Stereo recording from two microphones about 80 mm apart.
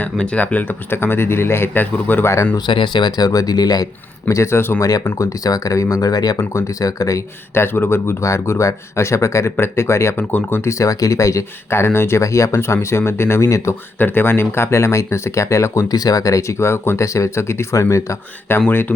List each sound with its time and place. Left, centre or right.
0.0 s speech: centre
2.6 s speech: left
4.3 s speech: left
4.8 s speech: left
6.5 s speech: left
7.5 s speech: left
10.2 s speech: left
10.7 s speech: left
15.9 s speech: left